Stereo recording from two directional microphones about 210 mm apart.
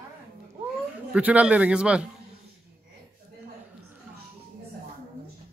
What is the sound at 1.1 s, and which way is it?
Speech, 5° right (ahead or behind).